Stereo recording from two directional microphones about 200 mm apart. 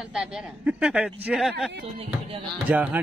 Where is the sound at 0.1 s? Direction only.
5° right (ahead or behind).